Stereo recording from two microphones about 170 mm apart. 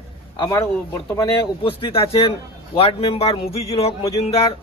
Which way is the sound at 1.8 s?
35° left (ahead or behind).